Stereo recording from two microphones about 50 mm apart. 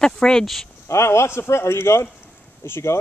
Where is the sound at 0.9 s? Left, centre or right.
Left.